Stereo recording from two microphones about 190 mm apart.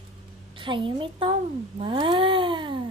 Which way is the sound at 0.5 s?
25° right (ahead or behind).